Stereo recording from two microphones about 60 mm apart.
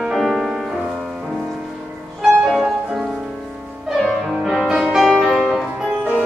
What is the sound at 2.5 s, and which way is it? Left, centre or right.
Music, centre.